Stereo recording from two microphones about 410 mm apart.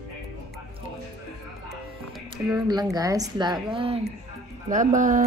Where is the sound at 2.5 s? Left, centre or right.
Centre.